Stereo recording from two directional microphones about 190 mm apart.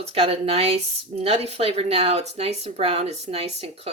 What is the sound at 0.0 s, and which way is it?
Speech, 30° right (ahead or behind).